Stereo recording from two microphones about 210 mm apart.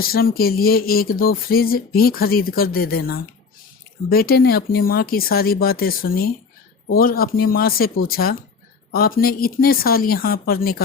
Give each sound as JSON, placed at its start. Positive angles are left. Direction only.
{"t": 0.0, "sound": "speech", "side_deg": 45}